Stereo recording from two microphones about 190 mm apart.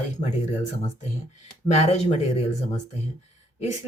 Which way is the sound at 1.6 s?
35° left (ahead or behind).